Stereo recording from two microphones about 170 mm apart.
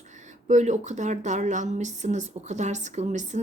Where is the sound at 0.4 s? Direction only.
45° right (ahead or behind).